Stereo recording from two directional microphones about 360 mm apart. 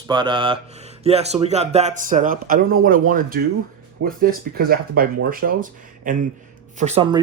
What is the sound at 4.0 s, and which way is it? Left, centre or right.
Speech, right.